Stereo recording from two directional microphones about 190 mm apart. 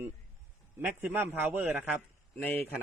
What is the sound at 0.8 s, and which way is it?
A man's voice, 10° right (ahead or behind).